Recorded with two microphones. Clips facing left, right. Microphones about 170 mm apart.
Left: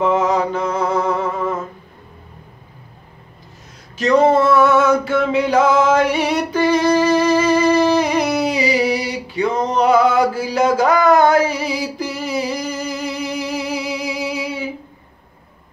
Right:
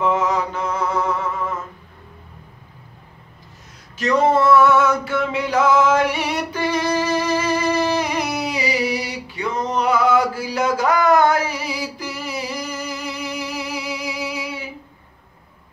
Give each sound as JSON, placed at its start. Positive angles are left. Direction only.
{"t": 0.1, "sound": "music", "side_deg": 30}
{"t": 3.9, "sound": "a sound", "side_deg": 30}
{"t": 8.4, "sound": "male singing", "side_deg": 25}